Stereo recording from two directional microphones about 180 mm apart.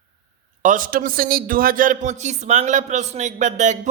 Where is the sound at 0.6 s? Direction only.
45° right (ahead or behind).